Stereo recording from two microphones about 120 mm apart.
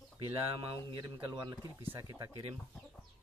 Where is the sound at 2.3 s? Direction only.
55° right (ahead or behind).